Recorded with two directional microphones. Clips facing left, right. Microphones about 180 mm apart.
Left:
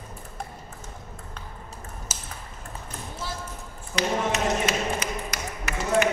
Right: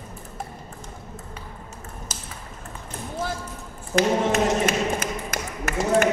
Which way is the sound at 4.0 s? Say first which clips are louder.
Right 5 dB; 50° right (ahead or behind).